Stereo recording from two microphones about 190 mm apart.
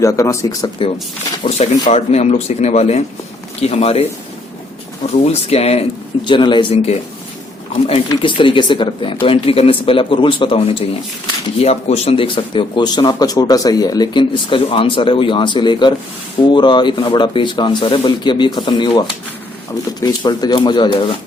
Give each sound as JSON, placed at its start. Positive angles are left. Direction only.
{"t": 0.0, "sound": "speech", "side_deg": 15}
{"t": 1.5, "sound": "speech", "side_deg": 35}
{"t": 5.2, "sound": "speech", "side_deg": 35}